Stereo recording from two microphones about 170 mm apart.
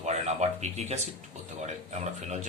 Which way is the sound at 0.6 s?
40° right (ahead or behind).